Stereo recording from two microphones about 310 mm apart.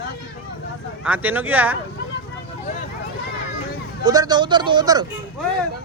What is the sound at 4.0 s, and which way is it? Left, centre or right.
Speech, centre.